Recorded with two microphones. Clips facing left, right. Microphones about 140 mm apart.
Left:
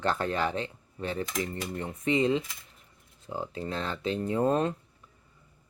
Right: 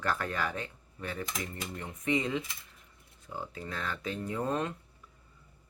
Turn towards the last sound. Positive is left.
turn(degrees=35)  # may be behind; listen again after turning